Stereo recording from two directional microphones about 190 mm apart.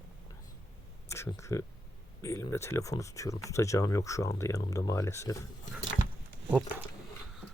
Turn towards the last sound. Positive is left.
turn(degrees=-5)  # may be behind; listen again after turning